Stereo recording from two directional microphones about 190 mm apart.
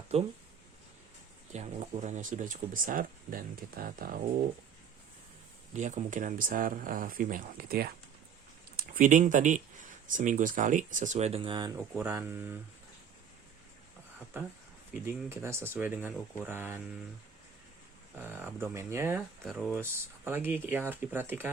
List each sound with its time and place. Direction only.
0.1 s speech: 30° right (ahead or behind)
1.5 s speech: 35° right (ahead or behind)
5.7 s speech: 40° right (ahead or behind); by 11.7 s 25° right (ahead or behind)
11.9 s speech: 10° right (ahead or behind)
15.0 s speech: 15° right (ahead or behind)
18.2 s speech: 10° right (ahead or behind)